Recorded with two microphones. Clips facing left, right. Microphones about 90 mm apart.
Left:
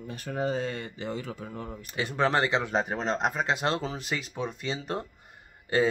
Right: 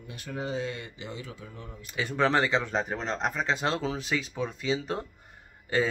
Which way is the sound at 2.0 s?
5° left (ahead or behind).